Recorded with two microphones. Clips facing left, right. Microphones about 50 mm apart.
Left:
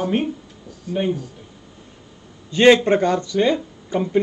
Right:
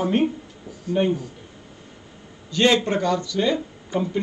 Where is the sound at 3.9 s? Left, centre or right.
Left.